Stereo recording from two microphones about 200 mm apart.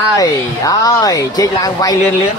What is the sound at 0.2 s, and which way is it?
A woman's voice, 15° left (ahead or behind).